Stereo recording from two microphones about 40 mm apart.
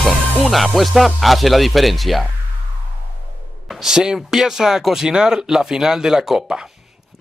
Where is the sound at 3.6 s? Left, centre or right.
Centre.